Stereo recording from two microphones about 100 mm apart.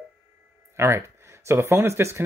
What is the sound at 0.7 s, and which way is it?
Speech, 25° right (ahead or behind).